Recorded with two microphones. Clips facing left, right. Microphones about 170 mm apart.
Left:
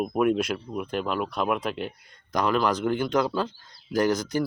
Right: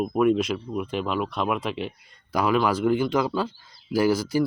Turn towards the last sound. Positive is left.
turn(degrees=-5)  # may be behind; listen again after turning